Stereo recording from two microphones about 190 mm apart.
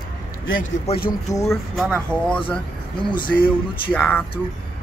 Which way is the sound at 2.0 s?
5° left (ahead or behind).